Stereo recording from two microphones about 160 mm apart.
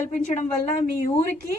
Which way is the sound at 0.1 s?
50° left (ahead or behind).